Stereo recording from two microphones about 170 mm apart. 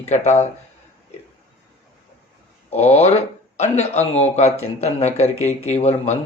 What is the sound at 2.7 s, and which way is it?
Speech, 40° left (ahead or behind).